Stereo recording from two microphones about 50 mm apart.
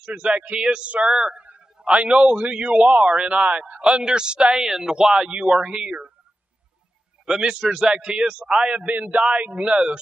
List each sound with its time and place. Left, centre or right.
0.0 s a man's voice: right
1.4 s a man's voice: right
3.3 s a man's voice: right
4.6 s speech: centre
7.2 s speech: centre
8.8 s a man's voice: right